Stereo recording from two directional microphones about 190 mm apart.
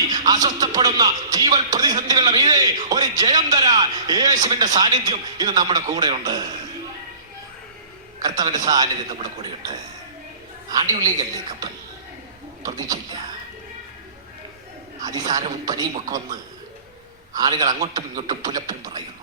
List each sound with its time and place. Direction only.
0.1 s a man's voice: 20° right (ahead or behind)
8.2 s a man's voice: 20° right (ahead or behind)
15.0 s a man's voice: 20° right (ahead or behind)
17.3 s a man's voice: 20° right (ahead or behind)